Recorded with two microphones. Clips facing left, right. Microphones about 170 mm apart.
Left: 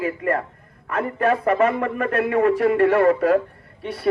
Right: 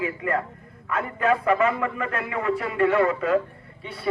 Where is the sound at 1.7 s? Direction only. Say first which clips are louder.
Left 4 dB; 50° left (ahead or behind).